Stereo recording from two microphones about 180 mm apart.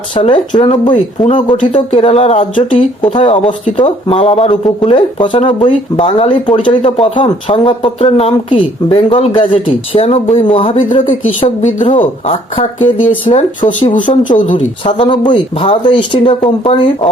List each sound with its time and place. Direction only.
0.2 s a woman's voice: 30° left (ahead or behind)
11.4 s a woman's voice: 40° left (ahead or behind)
14.8 s a woman's voice: 30° left (ahead or behind)